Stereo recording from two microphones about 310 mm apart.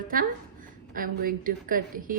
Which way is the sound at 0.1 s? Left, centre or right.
Right.